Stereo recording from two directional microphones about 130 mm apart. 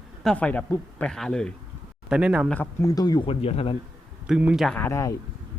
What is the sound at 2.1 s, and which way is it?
Speech, 5° right (ahead or behind).